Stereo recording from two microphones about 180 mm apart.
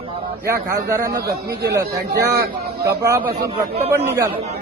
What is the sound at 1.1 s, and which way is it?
Speech, 60° right (ahead or behind).